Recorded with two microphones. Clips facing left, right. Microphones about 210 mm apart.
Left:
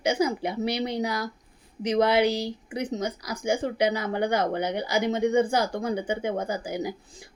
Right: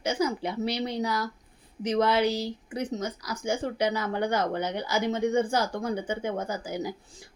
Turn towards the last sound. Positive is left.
turn(degrees=10)  # may be behind; listen again after turning